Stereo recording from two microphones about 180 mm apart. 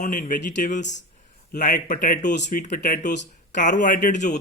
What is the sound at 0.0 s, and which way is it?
A man's voice, 50° left (ahead or behind).